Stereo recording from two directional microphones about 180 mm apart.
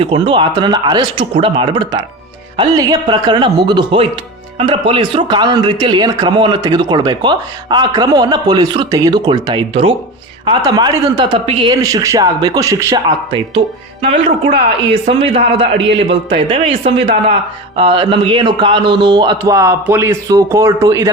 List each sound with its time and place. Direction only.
0.0 s speech: 30° right (ahead or behind)